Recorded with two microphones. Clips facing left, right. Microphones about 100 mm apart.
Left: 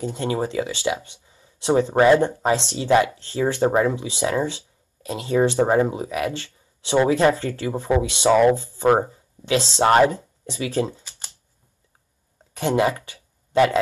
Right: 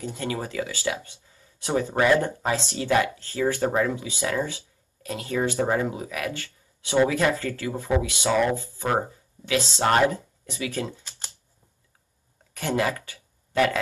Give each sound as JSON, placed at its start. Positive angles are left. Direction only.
{"t": 0.0, "sound": "speech", "side_deg": 25}
{"t": 12.5, "sound": "speech", "side_deg": 25}